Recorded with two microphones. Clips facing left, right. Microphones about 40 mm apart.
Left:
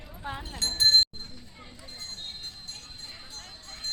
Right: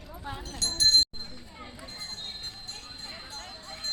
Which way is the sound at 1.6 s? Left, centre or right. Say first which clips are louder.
Right 3 dB; centre.